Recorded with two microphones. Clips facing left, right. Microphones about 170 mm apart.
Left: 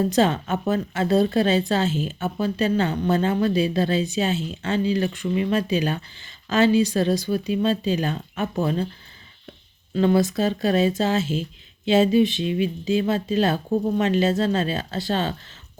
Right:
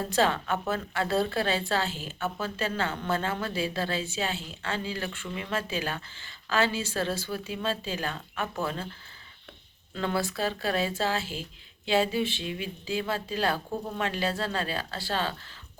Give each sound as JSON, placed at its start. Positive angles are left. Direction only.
{"t": 0.1, "sound": "speech", "side_deg": 20}
{"t": 9.9, "sound": "speech", "side_deg": 15}